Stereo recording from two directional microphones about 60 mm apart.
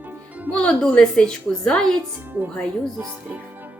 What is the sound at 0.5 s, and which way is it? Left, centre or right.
A woman's voice, centre.